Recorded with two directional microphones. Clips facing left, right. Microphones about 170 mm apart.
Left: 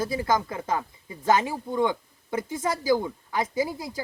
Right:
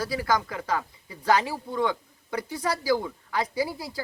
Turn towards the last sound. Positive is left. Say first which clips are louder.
# left 1 dB
turn(degrees=20)  # may be behind; listen again after turning